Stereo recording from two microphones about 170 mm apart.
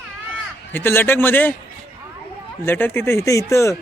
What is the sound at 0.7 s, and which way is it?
Speech, 10° left (ahead or behind).